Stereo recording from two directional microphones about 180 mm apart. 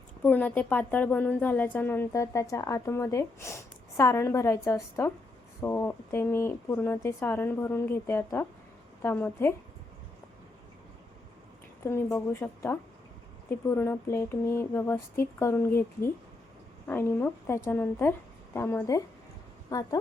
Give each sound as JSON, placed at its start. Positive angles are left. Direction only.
{"t": 0.2, "sound": "speech", "side_deg": 10}
{"t": 11.8, "sound": "a woman's voice", "side_deg": 15}